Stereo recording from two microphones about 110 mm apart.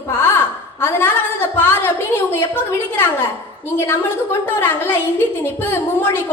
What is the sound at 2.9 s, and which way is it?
A woman's voice, 20° left (ahead or behind).